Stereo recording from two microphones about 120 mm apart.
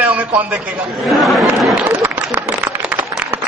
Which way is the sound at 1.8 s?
15° right (ahead or behind).